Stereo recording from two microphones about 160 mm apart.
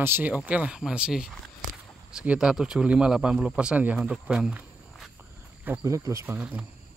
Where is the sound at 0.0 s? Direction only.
10° right (ahead or behind).